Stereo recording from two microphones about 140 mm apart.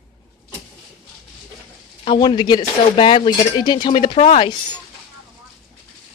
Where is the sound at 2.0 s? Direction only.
35° left (ahead or behind).